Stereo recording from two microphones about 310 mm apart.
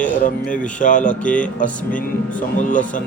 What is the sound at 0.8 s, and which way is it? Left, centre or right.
Speech, left.